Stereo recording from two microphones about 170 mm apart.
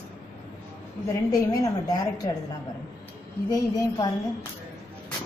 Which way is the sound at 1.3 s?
20° left (ahead or behind).